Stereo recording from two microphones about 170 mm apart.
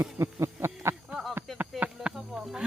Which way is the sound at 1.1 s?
Centre (ahead or behind).